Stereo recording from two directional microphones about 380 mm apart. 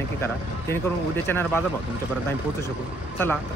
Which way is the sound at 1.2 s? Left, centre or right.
Centre.